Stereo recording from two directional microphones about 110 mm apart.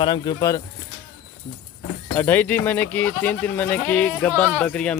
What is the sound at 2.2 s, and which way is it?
Speech, 15° left (ahead or behind).